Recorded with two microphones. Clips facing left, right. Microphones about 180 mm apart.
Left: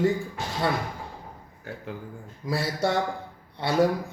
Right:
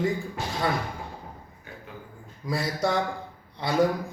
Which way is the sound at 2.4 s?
Centre (ahead or behind).